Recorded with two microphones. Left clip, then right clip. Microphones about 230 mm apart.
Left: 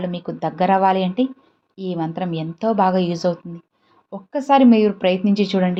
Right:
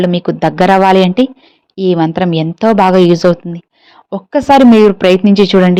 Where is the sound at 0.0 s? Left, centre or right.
Right.